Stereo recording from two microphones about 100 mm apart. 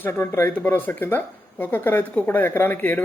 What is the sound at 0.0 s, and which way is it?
Speech, 25° left (ahead or behind).